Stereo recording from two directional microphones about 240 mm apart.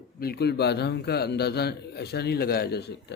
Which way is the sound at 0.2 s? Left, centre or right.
Left.